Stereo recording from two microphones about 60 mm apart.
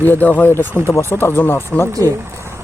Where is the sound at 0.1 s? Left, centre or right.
Left.